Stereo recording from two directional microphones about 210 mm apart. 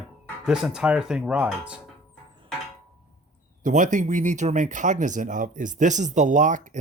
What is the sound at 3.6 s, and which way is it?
Speech, 35° right (ahead or behind).